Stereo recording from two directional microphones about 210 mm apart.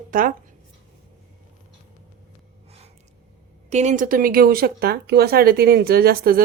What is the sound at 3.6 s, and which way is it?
Speech, 35° right (ahead or behind).